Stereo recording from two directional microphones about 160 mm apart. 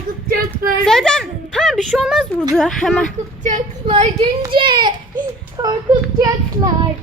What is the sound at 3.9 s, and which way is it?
A child's voice, 40° right (ahead or behind).